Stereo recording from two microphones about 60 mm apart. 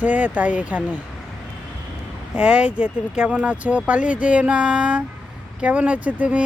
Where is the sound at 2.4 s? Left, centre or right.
Centre.